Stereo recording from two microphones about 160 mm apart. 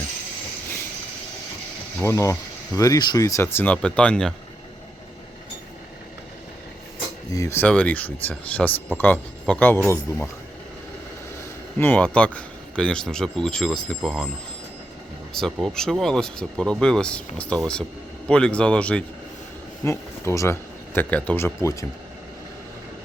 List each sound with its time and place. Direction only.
2.0 s speech: 15° left (ahead or behind)
7.3 s speech: 20° left (ahead or behind)
11.8 s speech: 10° left (ahead or behind)
15.6 s speech: centre (ahead or behind); by 21.8 s 20° left (ahead or behind)